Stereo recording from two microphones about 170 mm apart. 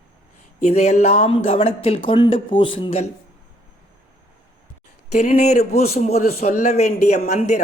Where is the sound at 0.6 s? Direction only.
40° left (ahead or behind).